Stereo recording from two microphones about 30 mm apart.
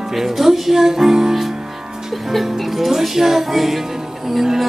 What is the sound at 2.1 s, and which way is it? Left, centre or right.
Music, centre.